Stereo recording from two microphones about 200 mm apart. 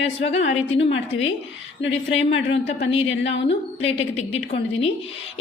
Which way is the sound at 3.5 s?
30° left (ahead or behind).